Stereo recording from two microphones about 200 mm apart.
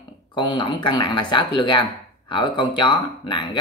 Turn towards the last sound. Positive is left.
turn(degrees=25)  # may be behind; listen again after turning